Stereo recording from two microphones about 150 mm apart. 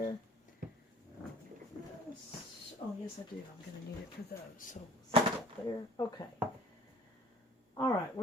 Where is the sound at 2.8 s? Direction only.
30° left (ahead or behind).